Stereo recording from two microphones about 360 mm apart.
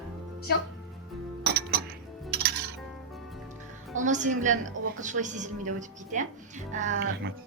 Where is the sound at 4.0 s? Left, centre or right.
Right.